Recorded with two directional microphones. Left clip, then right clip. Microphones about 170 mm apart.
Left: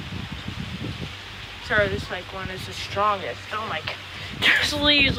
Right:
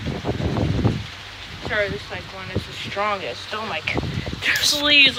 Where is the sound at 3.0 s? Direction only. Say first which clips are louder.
Left 1 dB; centre (ahead or behind).